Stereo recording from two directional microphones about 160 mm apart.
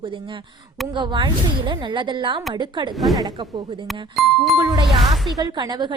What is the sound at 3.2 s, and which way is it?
Speech, 25° right (ahead or behind).